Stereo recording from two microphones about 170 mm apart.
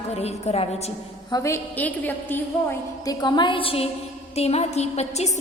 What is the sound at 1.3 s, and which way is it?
A woman's voice, 15° left (ahead or behind).